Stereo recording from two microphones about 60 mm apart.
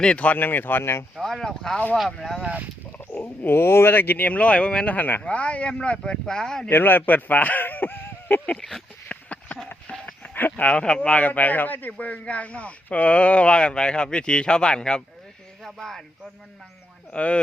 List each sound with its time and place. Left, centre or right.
0.0 s speech: centre
0.3 s speech: left
1.1 s speech: centre
2.4 s speech: right
3.1 s speech: left; by 6.7 s centre
6.7 s speech: left
9.0 s a sound: left
10.2 s speech: left; by 16.0 s centre
17.1 s speech: left